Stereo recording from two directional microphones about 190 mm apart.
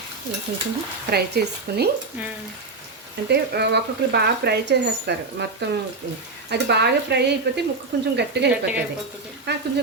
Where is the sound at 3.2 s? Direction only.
60° right (ahead or behind).